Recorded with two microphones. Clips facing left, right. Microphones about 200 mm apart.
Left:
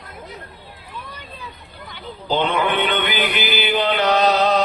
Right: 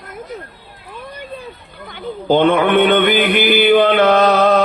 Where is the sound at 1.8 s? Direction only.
50° right (ahead or behind).